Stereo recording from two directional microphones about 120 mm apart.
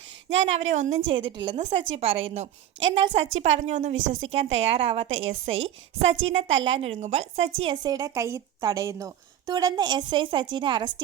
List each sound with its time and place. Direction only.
0.3 s speech: 75° right (ahead or behind)
1.1 s a woman's voice: 45° right (ahead or behind)
3.1 s a woman's voice: 80° right; by 7.0 s 50° right (ahead or behind)
7.0 s a woman's voice: 65° right (ahead or behind)
7.7 s speech: 35° right (ahead or behind)